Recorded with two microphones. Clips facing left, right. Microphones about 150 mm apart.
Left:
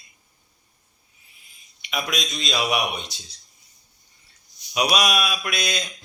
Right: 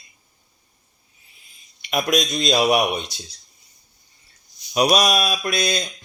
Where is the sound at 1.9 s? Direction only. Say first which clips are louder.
Right 7 dB; 45° right (ahead or behind).